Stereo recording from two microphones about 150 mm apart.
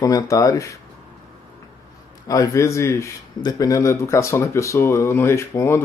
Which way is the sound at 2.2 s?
25° left (ahead or behind).